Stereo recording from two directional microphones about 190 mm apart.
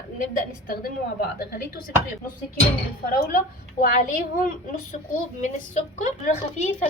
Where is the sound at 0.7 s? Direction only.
50° left (ahead or behind).